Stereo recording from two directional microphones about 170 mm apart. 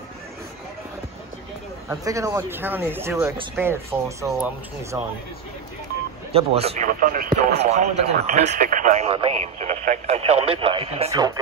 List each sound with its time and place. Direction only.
1.9 s speech: 20° right (ahead or behind)
6.3 s speech: 35° right (ahead or behind)
6.9 s speech: 55° right (ahead or behind)
7.6 s speech: 40° right (ahead or behind)
8.5 s speech: 55° right (ahead or behind); by 11.1 s 35° right (ahead or behind)
11.1 s speech: 20° right (ahead or behind)